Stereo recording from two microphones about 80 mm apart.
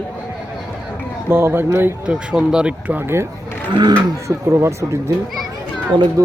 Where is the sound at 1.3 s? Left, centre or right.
Right.